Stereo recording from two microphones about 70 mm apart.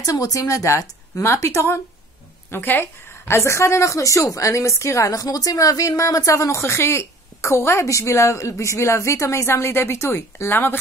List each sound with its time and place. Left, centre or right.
0.0 s a woman's voice: left
2.5 s a woman's voice: left